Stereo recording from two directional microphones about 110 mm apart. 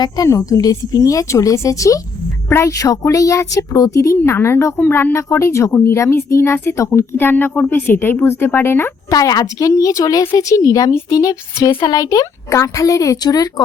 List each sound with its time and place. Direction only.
0.0 s a woman's voice: 30° left (ahead or behind)
9.0 s a woman's voice: 35° left (ahead or behind)